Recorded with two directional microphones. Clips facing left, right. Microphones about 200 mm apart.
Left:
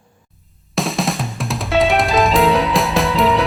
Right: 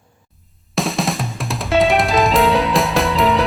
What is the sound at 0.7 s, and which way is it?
Music, centre (ahead or behind).